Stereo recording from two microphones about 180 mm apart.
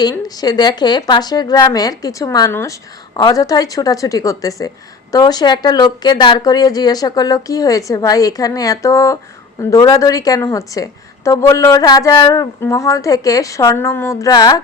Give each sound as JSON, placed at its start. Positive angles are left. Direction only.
{"t": 0.0, "sound": "speech", "side_deg": 20}